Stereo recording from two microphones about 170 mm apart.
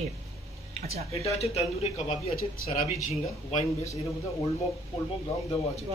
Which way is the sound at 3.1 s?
40° left (ahead or behind).